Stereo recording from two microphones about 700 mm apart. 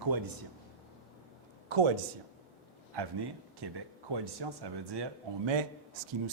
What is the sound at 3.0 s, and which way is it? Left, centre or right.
A man's voice, right.